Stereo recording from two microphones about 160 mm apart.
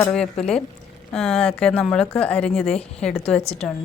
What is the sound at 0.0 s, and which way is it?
Speech, 5° left (ahead or behind).